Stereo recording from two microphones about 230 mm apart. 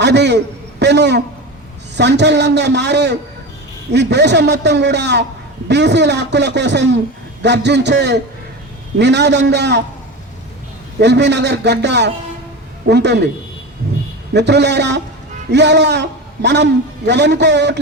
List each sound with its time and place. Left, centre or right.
0.0 s a man's voice: right
11.0 s a man's voice: right
14.3 s a man's voice: right